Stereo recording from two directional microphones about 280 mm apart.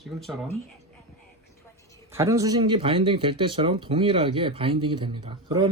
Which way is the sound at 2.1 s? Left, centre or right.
Centre.